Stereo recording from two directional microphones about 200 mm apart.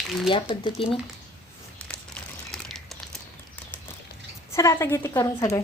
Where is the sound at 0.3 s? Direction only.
25° left (ahead or behind).